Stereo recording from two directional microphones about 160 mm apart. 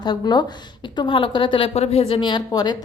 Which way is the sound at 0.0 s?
25° left (ahead or behind).